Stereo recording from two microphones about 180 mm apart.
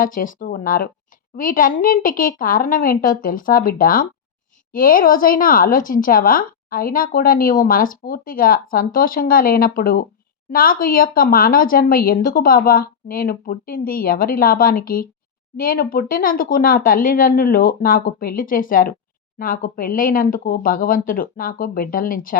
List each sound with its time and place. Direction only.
0.0 s speech: 50° left (ahead or behind)